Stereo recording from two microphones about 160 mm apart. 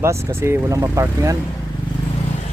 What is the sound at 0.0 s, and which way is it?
Speech, 15° right (ahead or behind).